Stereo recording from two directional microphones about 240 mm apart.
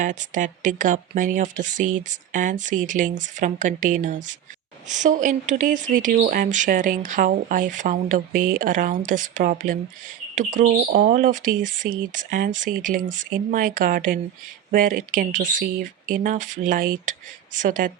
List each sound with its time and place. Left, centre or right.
0.0 s speech: right